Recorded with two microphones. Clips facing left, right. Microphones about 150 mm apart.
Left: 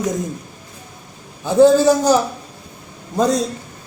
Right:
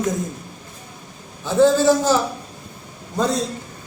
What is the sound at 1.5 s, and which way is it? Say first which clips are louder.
Speech: left 4 dB; 15° left (ahead or behind).